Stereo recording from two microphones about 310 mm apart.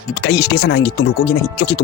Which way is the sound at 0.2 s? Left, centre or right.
Left.